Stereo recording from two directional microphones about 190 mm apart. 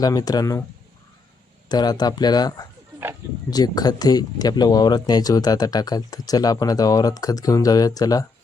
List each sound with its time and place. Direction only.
0.0 s speech: 20° left (ahead or behind)
1.7 s speech: 20° left (ahead or behind)